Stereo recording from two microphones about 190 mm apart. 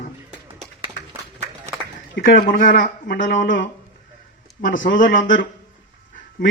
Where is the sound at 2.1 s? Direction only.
45° left (ahead or behind).